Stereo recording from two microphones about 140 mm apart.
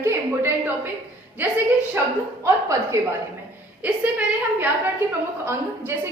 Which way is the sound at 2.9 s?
20° right (ahead or behind).